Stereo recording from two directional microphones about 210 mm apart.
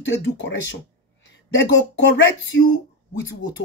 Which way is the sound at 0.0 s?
60° left (ahead or behind).